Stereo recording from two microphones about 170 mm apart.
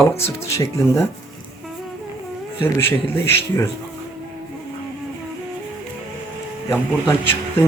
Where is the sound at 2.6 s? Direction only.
15° left (ahead or behind).